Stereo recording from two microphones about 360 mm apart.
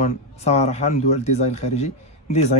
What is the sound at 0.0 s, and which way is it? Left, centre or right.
Speech, centre.